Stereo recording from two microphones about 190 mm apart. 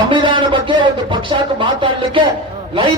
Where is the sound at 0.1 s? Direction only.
25° right (ahead or behind).